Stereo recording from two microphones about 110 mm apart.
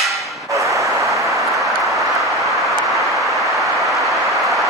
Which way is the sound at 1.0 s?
Centre (ahead or behind).